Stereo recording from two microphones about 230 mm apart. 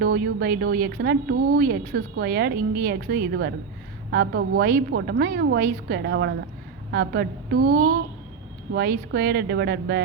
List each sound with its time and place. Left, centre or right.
0.0 s a woman's voice: right